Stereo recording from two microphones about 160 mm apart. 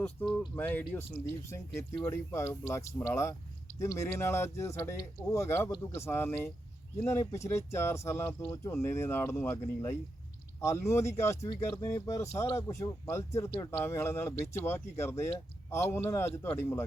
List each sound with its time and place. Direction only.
0.0 s speech: 10° left (ahead or behind)